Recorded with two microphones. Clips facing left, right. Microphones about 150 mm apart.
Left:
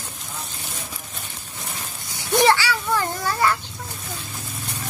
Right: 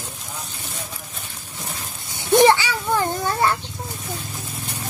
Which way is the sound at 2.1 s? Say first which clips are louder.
Right 4 dB; 20° right (ahead or behind).